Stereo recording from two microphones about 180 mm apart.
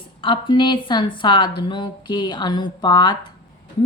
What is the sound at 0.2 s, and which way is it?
A woman's voice, 25° left (ahead or behind).